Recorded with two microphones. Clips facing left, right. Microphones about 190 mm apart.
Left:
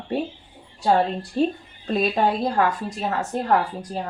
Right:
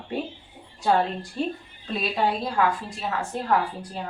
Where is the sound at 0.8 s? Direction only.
35° left (ahead or behind).